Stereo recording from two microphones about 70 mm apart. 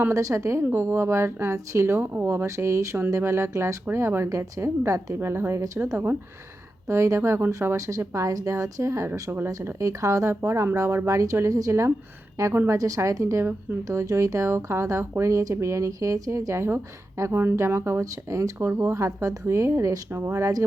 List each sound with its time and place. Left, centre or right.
0.1 s speech: right
6.8 s a woman's voice: right
18.0 s speech: right
18.7 s speech: right
18.9 s speech: right
20.1 s speech: right
20.4 s speech: right